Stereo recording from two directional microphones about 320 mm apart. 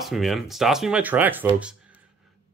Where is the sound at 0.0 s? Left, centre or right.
Centre.